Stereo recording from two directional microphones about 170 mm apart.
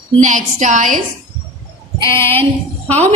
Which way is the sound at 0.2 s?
50° right (ahead or behind).